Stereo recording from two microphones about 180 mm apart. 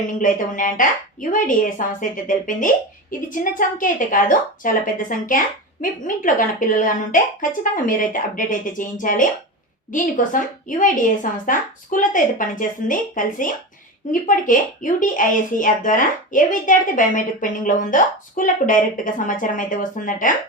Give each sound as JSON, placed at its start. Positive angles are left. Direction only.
{"t": 0.1, "sound": "speech", "side_deg": 45}